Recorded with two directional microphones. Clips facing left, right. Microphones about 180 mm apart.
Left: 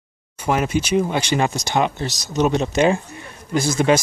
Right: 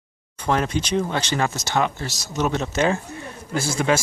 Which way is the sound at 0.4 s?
10° left (ahead or behind).